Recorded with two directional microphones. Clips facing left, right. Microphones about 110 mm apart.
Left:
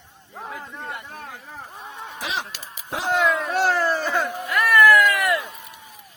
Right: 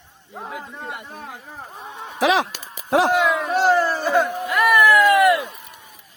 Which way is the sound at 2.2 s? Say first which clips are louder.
Right 12 dB; 90° right.